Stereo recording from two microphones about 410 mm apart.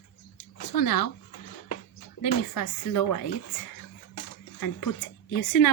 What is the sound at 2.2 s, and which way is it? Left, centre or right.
Speech, left.